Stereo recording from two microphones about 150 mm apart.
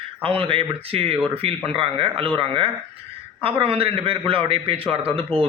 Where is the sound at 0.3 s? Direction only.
35° right (ahead or behind).